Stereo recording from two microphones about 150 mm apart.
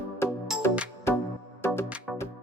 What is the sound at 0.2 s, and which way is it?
Music, 15° left (ahead or behind).